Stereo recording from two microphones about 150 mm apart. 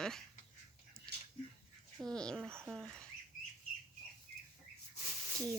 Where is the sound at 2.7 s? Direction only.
Centre (ahead or behind).